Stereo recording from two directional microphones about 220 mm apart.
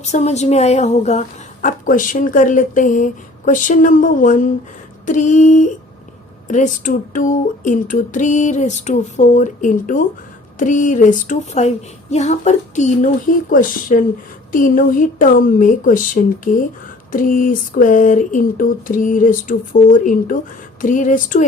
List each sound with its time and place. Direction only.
0.0 s speech: 30° left (ahead or behind)